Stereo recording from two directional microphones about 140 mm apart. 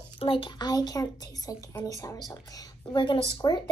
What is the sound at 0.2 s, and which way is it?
A woman's voice, 40° left (ahead or behind).